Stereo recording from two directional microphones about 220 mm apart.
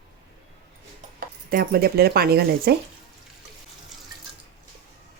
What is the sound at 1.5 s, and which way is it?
Speech, 40° right (ahead or behind).